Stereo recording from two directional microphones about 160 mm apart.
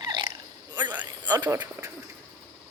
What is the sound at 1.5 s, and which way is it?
Speech, 20° right (ahead or behind).